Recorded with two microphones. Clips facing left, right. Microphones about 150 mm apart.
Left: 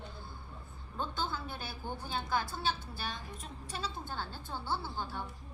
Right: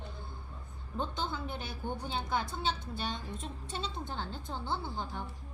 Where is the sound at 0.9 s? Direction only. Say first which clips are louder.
Right 1 dB; 20° right (ahead or behind).